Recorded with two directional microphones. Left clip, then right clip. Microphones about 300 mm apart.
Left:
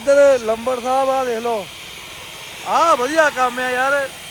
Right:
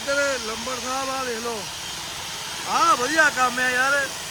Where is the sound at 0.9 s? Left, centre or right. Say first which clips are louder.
Left 10 dB; centre.